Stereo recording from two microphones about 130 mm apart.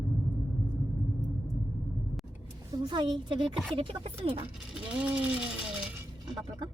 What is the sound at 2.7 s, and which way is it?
A woman's voice, 35° right (ahead or behind).